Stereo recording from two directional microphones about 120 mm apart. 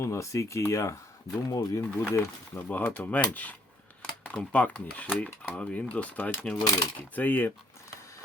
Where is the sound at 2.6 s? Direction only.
15° left (ahead or behind).